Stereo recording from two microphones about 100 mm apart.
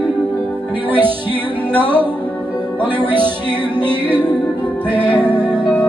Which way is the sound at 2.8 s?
20° right (ahead or behind).